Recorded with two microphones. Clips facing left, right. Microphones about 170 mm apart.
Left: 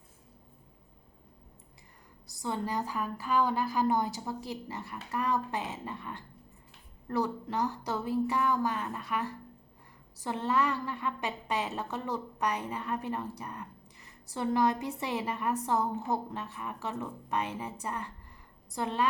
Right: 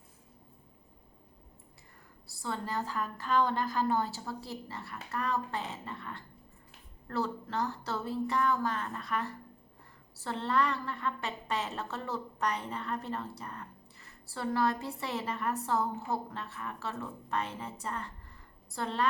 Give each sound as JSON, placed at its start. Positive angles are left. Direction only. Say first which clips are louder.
{"t": 2.2, "sound": "a woman's voice", "louder": "left 3 dB", "side_deg": 15}